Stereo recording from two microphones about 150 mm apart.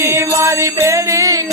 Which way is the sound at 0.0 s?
20° right (ahead or behind).